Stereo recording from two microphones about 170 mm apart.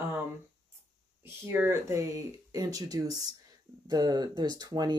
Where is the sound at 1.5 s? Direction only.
15° right (ahead or behind).